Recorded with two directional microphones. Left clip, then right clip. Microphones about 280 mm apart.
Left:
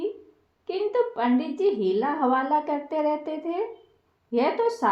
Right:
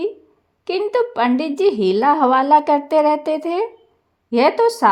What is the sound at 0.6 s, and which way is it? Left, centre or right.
A woman's voice, right.